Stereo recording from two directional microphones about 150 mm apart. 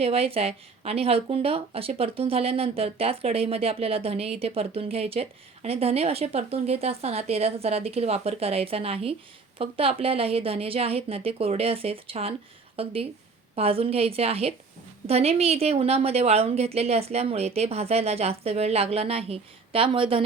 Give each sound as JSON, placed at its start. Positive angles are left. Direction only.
{"t": 0.0, "sound": "a woman's voice", "side_deg": -40}